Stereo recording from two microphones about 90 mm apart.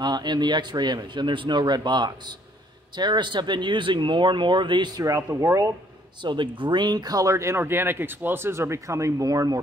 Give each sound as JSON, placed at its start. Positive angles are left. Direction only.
{"t": 0.0, "sound": "speech", "side_deg": -55}
{"t": 5.0, "sound": "speech", "side_deg": -35}
{"t": 6.2, "sound": "speech", "side_deg": -65}